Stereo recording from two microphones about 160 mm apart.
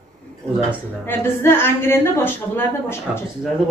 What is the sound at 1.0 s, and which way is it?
A woman's voice, 15° left (ahead or behind).